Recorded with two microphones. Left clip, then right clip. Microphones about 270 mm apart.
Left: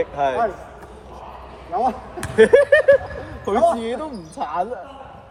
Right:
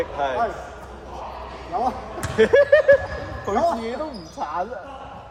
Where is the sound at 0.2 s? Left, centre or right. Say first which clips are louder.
Left 3 dB; left.